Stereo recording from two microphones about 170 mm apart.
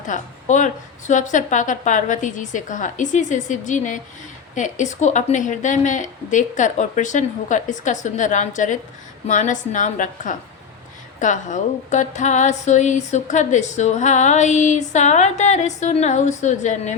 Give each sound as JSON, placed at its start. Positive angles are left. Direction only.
{"t": 0.1, "sound": "speech", "side_deg": 45}